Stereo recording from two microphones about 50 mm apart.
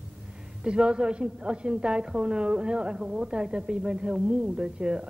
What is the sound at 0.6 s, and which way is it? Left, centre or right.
A woman's voice, centre.